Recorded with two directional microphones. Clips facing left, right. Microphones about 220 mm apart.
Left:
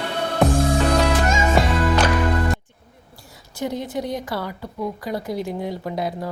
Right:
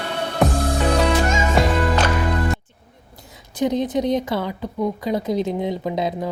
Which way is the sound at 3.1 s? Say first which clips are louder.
Right 6 dB; 20° right (ahead or behind).